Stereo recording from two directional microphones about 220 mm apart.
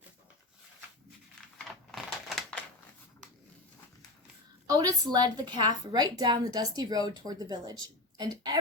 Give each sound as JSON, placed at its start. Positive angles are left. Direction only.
{"t": 1.5, "sound": "typewriter", "side_deg": 0}
{"t": 4.6, "sound": "a woman's voice", "side_deg": -15}